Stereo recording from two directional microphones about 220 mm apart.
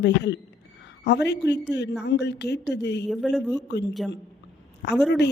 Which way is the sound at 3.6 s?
50° left (ahead or behind).